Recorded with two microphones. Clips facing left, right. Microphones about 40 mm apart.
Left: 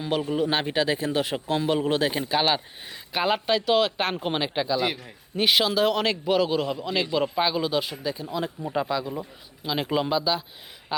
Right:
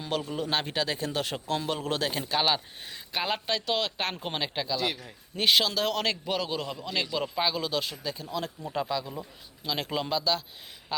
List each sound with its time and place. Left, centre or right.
0.3 s a man's voice: centre